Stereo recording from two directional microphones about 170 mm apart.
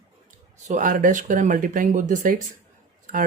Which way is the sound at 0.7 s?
50° right (ahead or behind).